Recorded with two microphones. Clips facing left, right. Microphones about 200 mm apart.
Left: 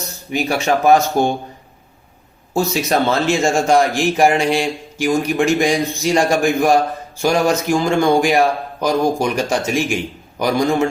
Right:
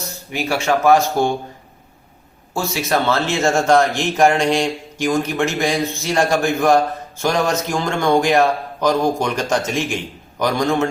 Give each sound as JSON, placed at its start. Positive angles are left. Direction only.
{"t": 0.3, "sound": "speech", "side_deg": 15}
{"t": 2.5, "sound": "speech", "side_deg": 20}